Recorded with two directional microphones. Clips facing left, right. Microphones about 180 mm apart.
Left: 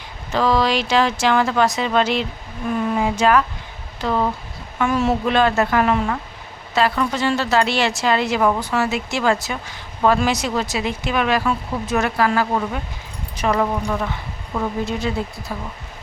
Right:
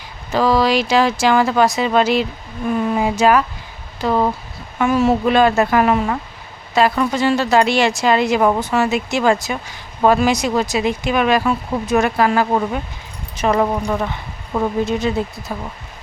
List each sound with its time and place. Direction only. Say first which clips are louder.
0.3 s speech: right 3 dB; 10° right (ahead or behind)
8.4 s speech: right 3 dB; 25° right (ahead or behind)
14.8 s speech: right 4 dB; 20° right (ahead or behind)